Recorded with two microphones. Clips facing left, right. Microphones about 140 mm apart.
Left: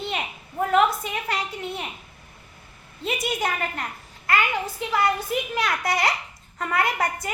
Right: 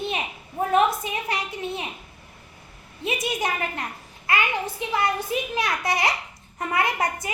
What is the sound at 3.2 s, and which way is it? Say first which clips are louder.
A woman's voice: left 1 dB; 20° right (ahead or behind).